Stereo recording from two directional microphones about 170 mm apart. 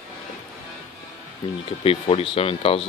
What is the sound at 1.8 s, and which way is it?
Speech, 35° left (ahead or behind).